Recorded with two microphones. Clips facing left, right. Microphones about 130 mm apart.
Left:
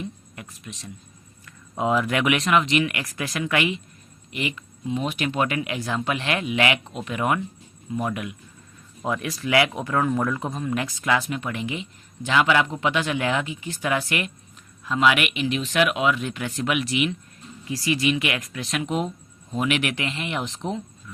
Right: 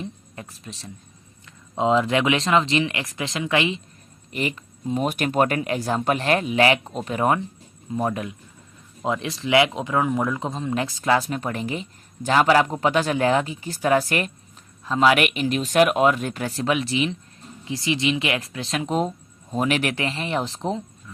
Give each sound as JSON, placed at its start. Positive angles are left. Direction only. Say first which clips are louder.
{"t": 0.0, "sound": "a sound", "louder": "right 1 dB", "side_deg": -30}
{"t": 1.5, "sound": "speech", "louder": "right 3 dB", "side_deg": -25}
{"t": 4.3, "sound": "speech", "louder": "right 2 dB", "side_deg": -40}